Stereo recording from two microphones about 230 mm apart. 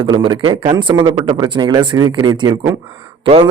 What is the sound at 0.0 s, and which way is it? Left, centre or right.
A man's voice, right.